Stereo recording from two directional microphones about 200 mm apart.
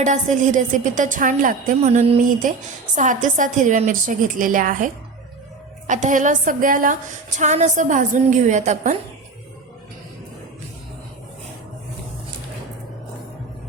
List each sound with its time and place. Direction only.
0.0 s a woman's voice: 40° right (ahead or behind)
5.9 s a woman's voice: 40° right (ahead or behind)